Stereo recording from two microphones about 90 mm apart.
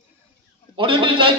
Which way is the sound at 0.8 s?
75° right (ahead or behind).